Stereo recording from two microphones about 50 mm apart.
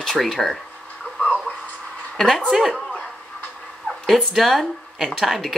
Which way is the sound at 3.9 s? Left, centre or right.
Left.